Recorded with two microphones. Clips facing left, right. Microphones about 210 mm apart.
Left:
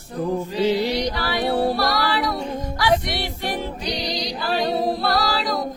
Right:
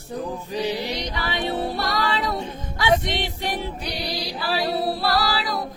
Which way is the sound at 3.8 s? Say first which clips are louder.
Left 3 dB; 5° right (ahead or behind).